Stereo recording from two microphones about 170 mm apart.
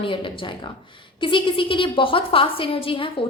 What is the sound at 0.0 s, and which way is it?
A woman's voice, 30° left (ahead or behind).